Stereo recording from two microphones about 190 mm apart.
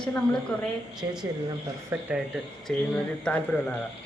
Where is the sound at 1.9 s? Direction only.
5° right (ahead or behind).